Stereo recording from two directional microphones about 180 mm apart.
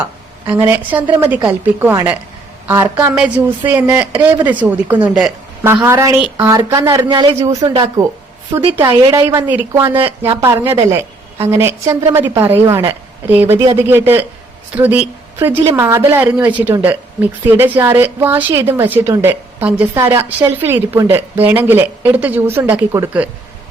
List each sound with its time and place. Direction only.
0.0 s a woman's voice: 10° right (ahead or behind)